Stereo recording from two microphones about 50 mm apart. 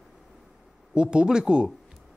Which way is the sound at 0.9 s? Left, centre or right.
Centre.